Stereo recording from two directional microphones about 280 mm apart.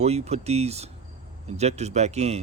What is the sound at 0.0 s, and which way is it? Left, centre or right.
Speech, right.